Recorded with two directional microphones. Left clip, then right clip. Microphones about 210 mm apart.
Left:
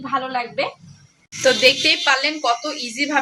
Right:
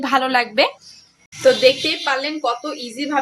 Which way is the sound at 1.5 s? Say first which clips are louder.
Right 1 dB; 10° right (ahead or behind).